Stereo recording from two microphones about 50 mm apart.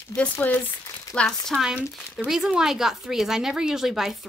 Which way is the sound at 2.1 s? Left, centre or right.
Centre.